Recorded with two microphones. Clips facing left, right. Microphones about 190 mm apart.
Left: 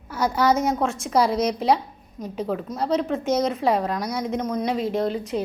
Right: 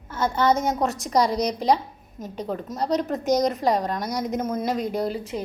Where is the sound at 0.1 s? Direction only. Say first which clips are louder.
Left 1 dB; 10° left (ahead or behind).